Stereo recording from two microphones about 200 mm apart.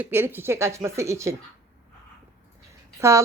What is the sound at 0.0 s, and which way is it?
Speech, 10° right (ahead or behind).